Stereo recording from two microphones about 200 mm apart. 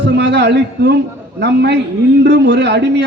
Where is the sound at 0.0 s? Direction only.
60° right (ahead or behind).